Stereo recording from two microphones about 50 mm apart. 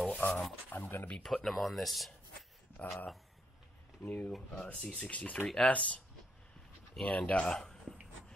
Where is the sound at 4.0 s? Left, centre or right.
Left.